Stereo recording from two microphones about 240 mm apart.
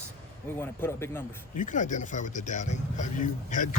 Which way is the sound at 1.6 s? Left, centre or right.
Left.